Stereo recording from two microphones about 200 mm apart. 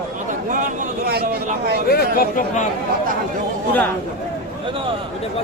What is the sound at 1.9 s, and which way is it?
Speech, 50° left (ahead or behind).